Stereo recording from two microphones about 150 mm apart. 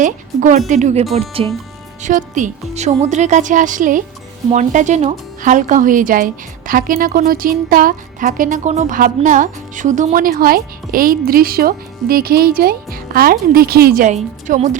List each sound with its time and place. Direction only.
0.0 s speech: 60° right (ahead or behind)
1.4 s speech: 40° right (ahead or behind)
2.0 s speech: 55° right (ahead or behind); by 14.1 s 80° right
14.1 s speech: 55° right (ahead or behind)